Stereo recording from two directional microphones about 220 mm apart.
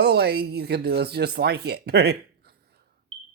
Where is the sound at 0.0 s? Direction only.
45° right (ahead or behind).